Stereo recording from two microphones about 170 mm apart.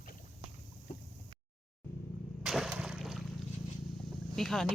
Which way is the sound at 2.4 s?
Centre (ahead or behind).